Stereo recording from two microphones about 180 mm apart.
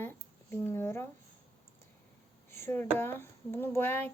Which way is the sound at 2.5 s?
10° left (ahead or behind).